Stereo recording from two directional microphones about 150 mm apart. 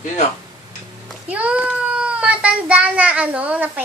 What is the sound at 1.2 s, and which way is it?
A child's voice, 10° right (ahead or behind).